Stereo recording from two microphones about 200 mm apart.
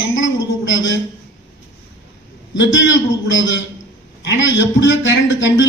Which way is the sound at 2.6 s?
65° left (ahead or behind).